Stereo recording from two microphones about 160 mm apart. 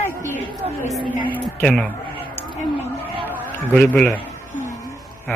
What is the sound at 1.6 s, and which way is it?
Speech, 10° left (ahead or behind).